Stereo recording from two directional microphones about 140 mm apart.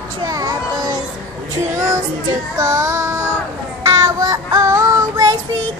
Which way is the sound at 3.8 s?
25° right (ahead or behind).